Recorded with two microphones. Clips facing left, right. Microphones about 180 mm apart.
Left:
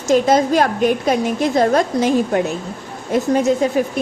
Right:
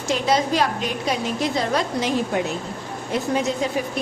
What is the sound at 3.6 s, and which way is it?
Speech, 50° left (ahead or behind).